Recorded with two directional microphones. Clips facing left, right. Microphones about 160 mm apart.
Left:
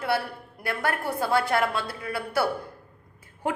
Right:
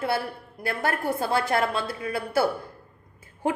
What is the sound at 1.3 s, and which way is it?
A woman's voice, 25° right (ahead or behind).